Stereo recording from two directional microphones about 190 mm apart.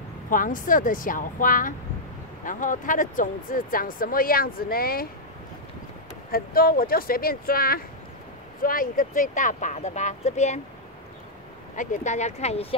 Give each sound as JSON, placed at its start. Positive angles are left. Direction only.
{"t": 0.3, "sound": "speech", "side_deg": 45}
{"t": 6.3, "sound": "speech", "side_deg": 50}
{"t": 11.7, "sound": "speech", "side_deg": 40}